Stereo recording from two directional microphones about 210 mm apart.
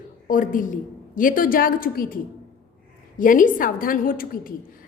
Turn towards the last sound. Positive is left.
turn(degrees=40)  # may be behind; listen again after turning